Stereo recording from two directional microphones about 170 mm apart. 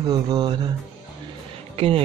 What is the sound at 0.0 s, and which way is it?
Speech, 25° right (ahead or behind).